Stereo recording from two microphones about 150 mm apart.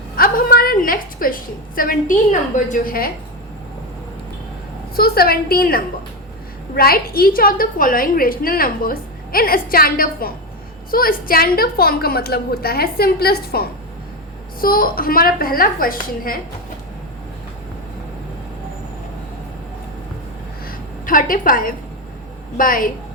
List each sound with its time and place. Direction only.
0.2 s a sound: 75° left (ahead or behind)
2.6 s a woman's voice: 65° left (ahead or behind)
4.9 s a woman's voice: 90° left
14.6 s a woman's voice: 75° left (ahead or behind)
20.7 s a sound: 70° left (ahead or behind)
22.5 s a woman's voice: 70° left (ahead or behind)